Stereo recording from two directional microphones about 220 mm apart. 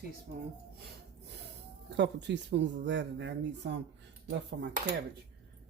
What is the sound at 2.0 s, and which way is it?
Speech, 50° right (ahead or behind).